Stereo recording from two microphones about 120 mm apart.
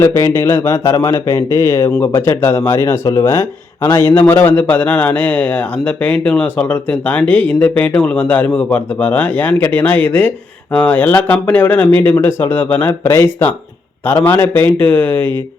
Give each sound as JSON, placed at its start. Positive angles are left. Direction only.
{"t": 0.0, "sound": "a man's voice", "side_deg": 20}